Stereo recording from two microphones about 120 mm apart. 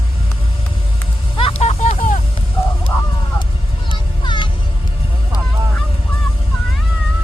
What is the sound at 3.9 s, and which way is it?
Music, 40° left (ahead or behind).